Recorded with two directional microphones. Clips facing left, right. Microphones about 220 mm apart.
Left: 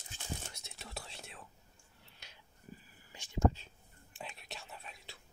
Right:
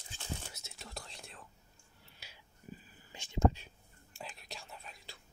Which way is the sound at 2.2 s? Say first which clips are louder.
Right 2 dB; 5° right (ahead or behind).